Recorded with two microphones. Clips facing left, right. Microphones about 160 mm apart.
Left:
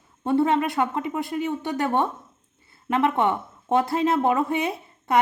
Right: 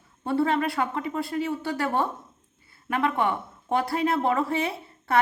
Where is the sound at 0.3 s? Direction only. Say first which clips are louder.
Left 3 dB; 20° left (ahead or behind).